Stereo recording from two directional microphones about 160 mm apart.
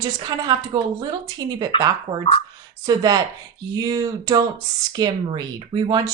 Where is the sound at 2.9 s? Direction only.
25° right (ahead or behind).